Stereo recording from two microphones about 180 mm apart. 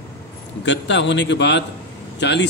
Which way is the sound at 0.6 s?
80° left.